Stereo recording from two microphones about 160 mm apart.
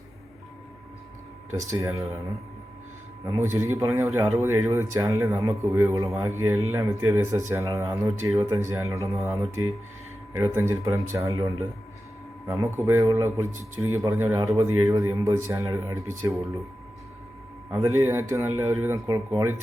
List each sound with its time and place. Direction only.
1.5 s a man's voice: 20° right (ahead or behind)
3.3 s a man's voice: 15° right (ahead or behind)
10.3 s a man's voice: 20° right (ahead or behind)
17.7 s speech: 20° right (ahead or behind)